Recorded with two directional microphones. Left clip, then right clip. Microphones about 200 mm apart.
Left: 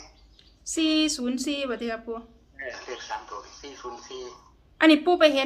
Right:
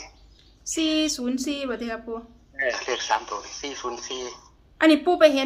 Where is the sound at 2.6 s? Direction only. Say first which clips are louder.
Right 10 dB; 50° right (ahead or behind).